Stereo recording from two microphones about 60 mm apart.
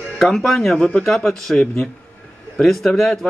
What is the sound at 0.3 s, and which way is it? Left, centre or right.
Speech, centre.